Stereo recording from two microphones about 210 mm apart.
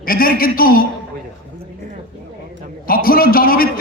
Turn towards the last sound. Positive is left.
turn(degrees=45)  # may be behind; listen again after turning